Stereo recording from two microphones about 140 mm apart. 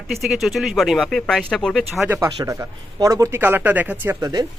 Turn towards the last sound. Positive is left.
turn(degrees=-30)  # may be behind; listen again after turning